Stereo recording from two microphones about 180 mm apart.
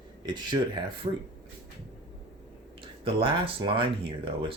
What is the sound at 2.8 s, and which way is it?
Speech, 30° right (ahead or behind).